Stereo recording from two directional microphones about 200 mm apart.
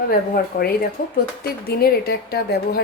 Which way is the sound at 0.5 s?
45° left (ahead or behind).